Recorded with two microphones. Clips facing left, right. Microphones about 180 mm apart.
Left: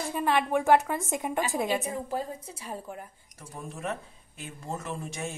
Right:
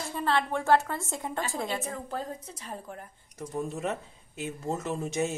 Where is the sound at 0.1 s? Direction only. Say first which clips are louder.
Left 2 dB; 15° left (ahead or behind).